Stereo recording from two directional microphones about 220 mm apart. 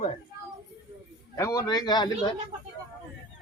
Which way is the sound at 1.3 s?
15° left (ahead or behind).